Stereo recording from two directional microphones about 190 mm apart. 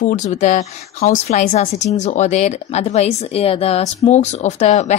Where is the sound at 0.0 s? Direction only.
40° left (ahead or behind).